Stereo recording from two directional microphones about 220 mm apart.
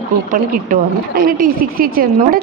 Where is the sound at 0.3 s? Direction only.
40° right (ahead or behind).